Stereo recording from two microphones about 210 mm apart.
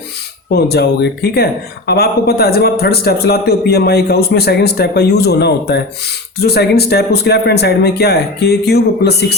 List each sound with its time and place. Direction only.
0.5 s a man's voice: 50° left (ahead or behind)